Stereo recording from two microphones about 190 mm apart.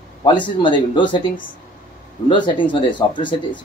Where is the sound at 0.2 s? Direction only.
25° left (ahead or behind).